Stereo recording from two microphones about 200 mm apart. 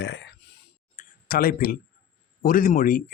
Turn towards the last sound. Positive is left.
turn(degrees=45)  # may be behind; listen again after turning